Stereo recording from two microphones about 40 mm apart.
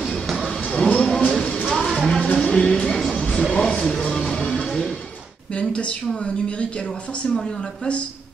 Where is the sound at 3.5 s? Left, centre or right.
Centre.